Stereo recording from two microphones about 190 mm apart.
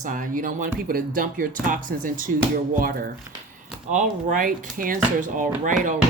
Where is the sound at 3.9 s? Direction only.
40° right (ahead or behind).